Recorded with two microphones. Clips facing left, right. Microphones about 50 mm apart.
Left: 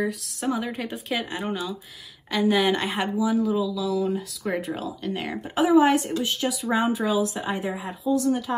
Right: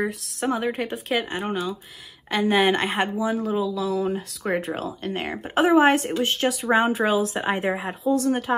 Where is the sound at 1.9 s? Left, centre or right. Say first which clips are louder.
Even; right.